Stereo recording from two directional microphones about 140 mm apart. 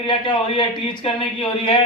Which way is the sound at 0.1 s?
35° left (ahead or behind).